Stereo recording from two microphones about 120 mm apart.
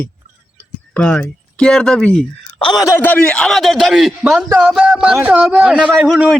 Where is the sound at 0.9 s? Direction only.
10° left (ahead or behind).